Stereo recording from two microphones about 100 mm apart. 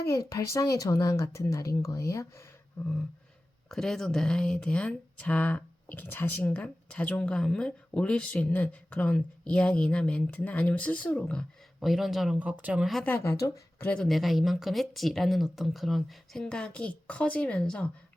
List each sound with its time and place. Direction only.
0.1 s speech: 35° left (ahead or behind)
2.8 s speech: 10° left (ahead or behind)
11.8 s speech: centre (ahead or behind)
12.4 s speech: 15° right (ahead or behind)
12.8 s speech: centre (ahead or behind)
13.1 s speech: 25° left (ahead or behind)
13.9 s speech: 5° left (ahead or behind)